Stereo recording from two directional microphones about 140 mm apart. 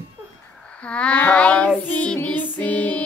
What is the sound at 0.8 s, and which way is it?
Child singing, 10° left (ahead or behind).